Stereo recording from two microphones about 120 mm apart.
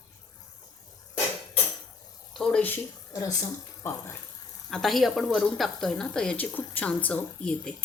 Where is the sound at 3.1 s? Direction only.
30° left (ahead or behind).